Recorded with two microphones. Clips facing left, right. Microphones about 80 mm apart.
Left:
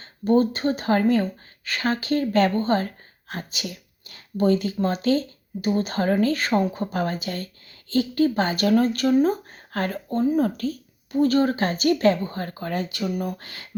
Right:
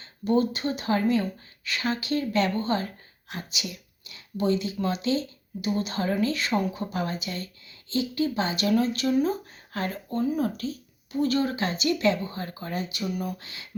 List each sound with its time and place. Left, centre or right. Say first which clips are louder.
0.0 s a woman's voice: left 4 dB; left